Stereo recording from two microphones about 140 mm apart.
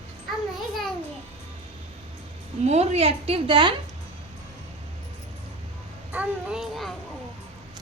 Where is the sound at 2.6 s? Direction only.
50° right (ahead or behind).